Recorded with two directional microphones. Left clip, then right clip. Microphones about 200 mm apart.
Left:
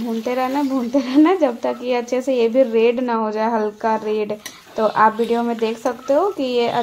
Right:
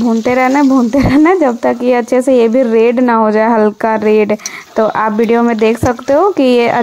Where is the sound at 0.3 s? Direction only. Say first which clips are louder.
Right 10 dB; 40° right (ahead or behind).